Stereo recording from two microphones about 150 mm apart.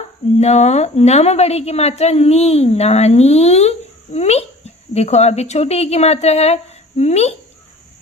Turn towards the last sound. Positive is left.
turn(degrees=45)  # may be behind; listen again after turning